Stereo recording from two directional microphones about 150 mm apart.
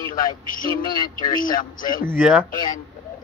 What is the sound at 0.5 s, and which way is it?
Speech, 65° left (ahead or behind).